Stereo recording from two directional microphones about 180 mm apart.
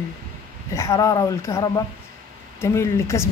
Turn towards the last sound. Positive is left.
turn(degrees=15)  # may be behind; listen again after turning